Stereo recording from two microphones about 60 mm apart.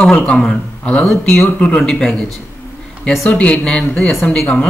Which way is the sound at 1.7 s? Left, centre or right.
Centre.